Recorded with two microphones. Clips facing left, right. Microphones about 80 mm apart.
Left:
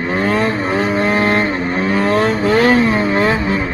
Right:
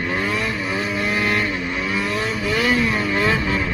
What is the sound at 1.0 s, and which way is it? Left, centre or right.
Vehicle, left.